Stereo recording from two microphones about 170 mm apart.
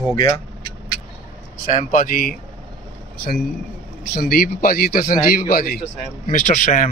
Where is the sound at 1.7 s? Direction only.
50° left (ahead or behind).